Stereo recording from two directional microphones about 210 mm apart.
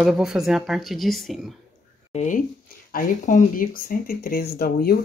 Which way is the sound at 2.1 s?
35° left (ahead or behind).